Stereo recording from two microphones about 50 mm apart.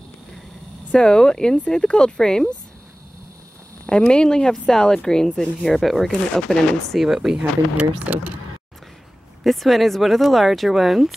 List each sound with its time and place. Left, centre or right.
0.9 s speech: centre
3.8 s speech: left
7.2 s speech: centre
7.8 s speech: right
9.4 s speech: centre